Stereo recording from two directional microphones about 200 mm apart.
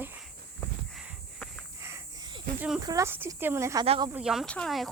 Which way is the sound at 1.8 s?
15° right (ahead or behind).